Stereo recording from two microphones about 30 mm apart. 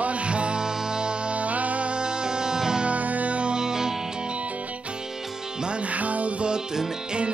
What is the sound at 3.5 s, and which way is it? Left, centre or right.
Music, right.